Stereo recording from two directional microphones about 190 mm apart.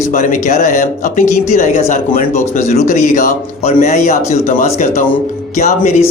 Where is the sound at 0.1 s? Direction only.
45° left (ahead or behind).